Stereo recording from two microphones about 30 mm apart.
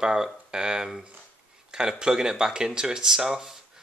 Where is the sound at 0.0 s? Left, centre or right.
Right.